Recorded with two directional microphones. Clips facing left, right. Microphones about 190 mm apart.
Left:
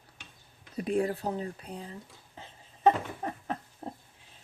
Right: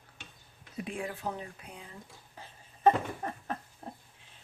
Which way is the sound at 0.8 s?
40° left (ahead or behind).